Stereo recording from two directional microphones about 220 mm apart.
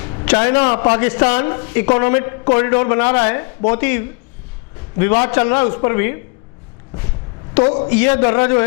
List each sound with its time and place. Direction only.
0.0 s a sound: 25° left (ahead or behind)
0.3 s a man's voice: 15° left (ahead or behind)
7.6 s a man's voice: 30° left (ahead or behind)
7.9 s speech: 15° left (ahead or behind)